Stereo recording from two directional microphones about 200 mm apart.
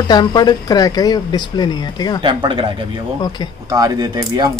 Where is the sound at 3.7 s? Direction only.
20° right (ahead or behind).